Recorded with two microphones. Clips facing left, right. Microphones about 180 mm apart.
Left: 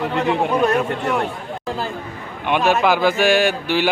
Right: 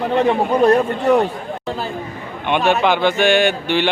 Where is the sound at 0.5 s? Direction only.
35° right (ahead or behind).